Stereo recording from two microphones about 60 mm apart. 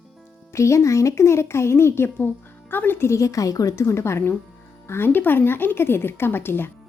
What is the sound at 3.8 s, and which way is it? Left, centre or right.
Speech, left.